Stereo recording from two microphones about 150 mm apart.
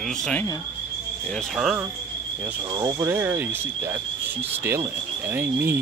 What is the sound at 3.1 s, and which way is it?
Speech, 15° right (ahead or behind).